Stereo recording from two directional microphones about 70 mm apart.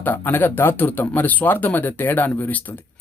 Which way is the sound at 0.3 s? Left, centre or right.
Left.